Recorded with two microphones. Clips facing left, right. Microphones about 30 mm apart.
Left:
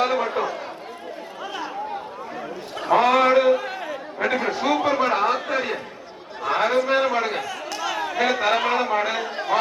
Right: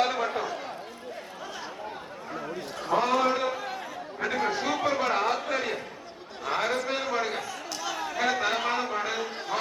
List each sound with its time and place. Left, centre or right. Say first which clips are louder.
0.0 s a sound: left 5 dB; centre
2.9 s a sound: left 8 dB; left
3.6 s chatter: left 6 dB; left
4.2 s chatter: left 7 dB; left
4.6 s chatter: left 6 dB; centre
6.4 s a man's voice: left 7 dB; centre